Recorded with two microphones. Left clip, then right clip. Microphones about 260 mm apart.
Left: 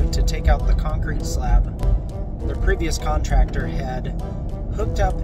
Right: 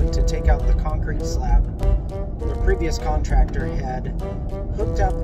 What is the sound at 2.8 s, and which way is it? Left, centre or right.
Speech, centre.